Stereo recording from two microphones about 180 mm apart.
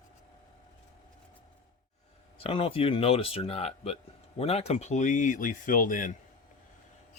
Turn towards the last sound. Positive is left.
turn(degrees=45)  # may be behind; listen again after turning